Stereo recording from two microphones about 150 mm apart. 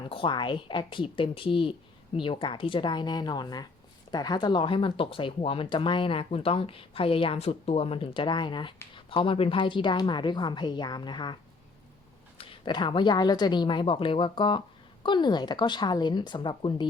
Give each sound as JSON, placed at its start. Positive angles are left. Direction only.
{"t": 0.1, "sound": "speech", "side_deg": 35}
{"t": 12.4, "sound": "speech", "side_deg": 35}